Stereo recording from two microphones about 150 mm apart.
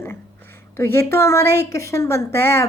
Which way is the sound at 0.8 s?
15° left (ahead or behind).